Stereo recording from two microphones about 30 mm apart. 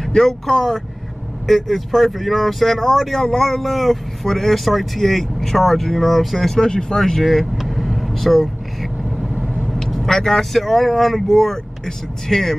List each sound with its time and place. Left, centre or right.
0.1 s speech: centre
0.5 s speech: centre
6.5 s speech: left
7.0 s vehicle: centre
9.8 s speech: centre